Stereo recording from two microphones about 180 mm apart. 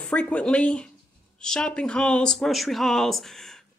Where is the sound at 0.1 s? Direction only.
5° left (ahead or behind).